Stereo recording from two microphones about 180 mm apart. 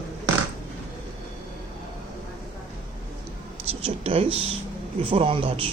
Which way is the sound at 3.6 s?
30° right (ahead or behind).